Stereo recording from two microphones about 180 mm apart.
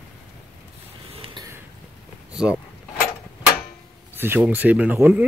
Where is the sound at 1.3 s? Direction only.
20° right (ahead or behind).